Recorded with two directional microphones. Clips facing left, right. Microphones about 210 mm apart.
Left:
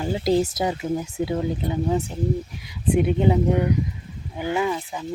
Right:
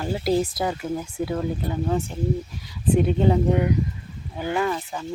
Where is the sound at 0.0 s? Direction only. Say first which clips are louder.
Left 2 dB; 15° left (ahead or behind).